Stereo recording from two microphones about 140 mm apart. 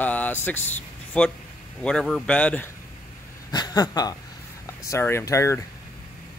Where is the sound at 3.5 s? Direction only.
30° left (ahead or behind).